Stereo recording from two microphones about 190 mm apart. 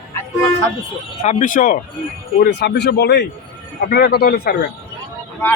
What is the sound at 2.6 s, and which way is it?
Speech, 60° left (ahead or behind).